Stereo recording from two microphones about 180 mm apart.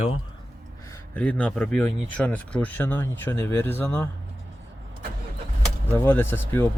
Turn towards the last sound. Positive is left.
turn(degrees=10)  # may be behind; listen again after turning